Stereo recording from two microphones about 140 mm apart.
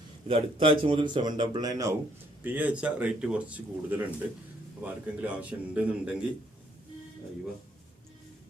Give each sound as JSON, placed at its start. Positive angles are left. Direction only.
{"t": 0.3, "sound": "speech", "side_deg": -40}
{"t": 2.4, "sound": "speech", "side_deg": -10}